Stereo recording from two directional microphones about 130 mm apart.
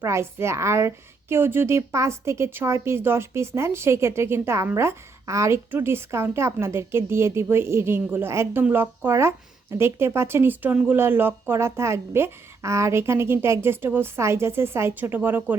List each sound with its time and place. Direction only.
0.0 s a woman's voice: 20° right (ahead or behind)